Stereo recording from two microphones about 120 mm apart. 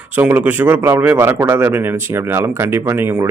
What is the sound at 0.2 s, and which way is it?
A man's voice, 15° right (ahead or behind).